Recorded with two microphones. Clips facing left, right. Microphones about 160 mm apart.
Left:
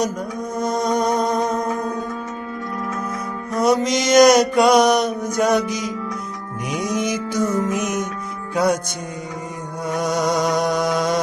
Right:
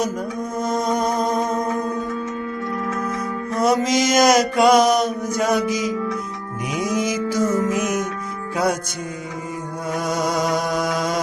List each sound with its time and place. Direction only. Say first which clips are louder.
0.9 s music: left 3 dB; 5° right (ahead or behind)
3.5 s mantra: left 1 dB; centre (ahead or behind)
5.4 s music: left 1 dB; centre (ahead or behind)
10.0 s music: left 2 dB; 5° right (ahead or behind)